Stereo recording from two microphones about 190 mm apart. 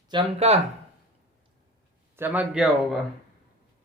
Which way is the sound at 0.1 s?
30° right (ahead or behind).